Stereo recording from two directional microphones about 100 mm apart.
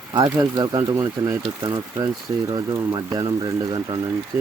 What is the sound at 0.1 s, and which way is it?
Speech, 45° right (ahead or behind).